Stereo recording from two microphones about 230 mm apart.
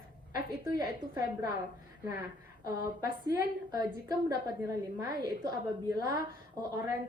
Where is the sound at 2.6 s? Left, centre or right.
Centre.